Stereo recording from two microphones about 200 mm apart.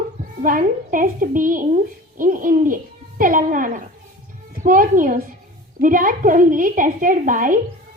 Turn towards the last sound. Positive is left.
turn(degrees=-40)  # may be behind; listen again after turning